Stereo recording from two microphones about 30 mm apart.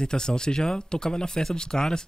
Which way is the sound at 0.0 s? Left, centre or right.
Left.